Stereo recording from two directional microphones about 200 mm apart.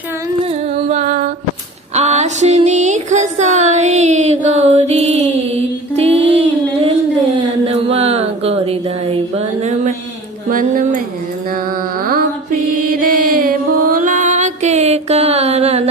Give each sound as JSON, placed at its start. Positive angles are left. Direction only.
{"t": 0.8, "sound": "music", "side_deg": -35}
{"t": 2.0, "sound": "a sound", "side_deg": -35}
{"t": 6.2, "sound": "child singing", "side_deg": -30}
{"t": 7.3, "sound": "a sound", "side_deg": -30}
{"t": 10.5, "sound": "a woman's voice", "side_deg": -45}
{"t": 12.7, "sound": "music", "side_deg": -45}